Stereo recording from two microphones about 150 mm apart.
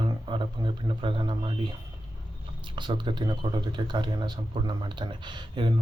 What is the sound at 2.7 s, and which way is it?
Speech, 30° right (ahead or behind).